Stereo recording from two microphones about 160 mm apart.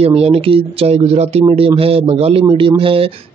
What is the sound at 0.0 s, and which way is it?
A man's voice, 35° right (ahead or behind).